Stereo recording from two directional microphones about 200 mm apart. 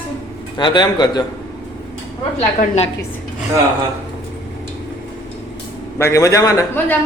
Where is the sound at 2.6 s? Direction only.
30° left (ahead or behind).